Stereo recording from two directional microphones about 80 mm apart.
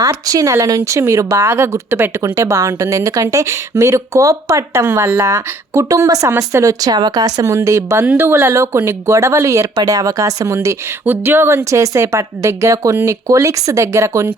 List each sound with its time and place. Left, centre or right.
0.0 s speech: right
4.9 s speech: right
9.7 s speech: right
11.0 s speech: right